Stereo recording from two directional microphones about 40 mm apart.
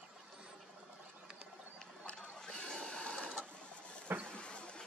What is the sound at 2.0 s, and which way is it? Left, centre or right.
Sewing machine, left.